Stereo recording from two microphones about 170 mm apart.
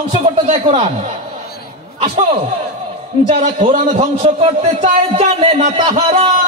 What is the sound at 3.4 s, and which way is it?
A man's voice, 50° right (ahead or behind).